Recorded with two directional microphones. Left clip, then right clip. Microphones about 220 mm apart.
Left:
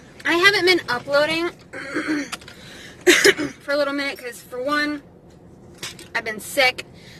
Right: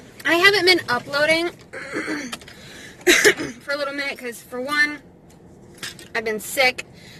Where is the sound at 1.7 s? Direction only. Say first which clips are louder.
Left 2 dB; centre (ahead or behind).